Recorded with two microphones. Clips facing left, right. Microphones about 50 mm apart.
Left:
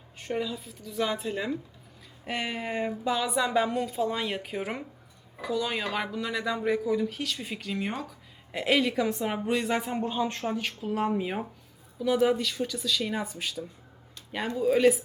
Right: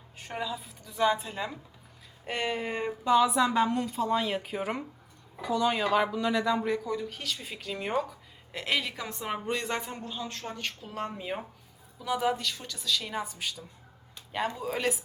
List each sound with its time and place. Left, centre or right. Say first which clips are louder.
0.2 s speech: left 3 dB; centre
9.9 s a woman's voice: left 8 dB; left
10.4 s speech: left 6 dB; centre